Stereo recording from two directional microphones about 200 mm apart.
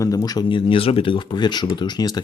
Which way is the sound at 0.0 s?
20° left (ahead or behind).